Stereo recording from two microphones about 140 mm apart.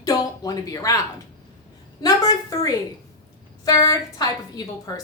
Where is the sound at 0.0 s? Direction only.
25° left (ahead or behind).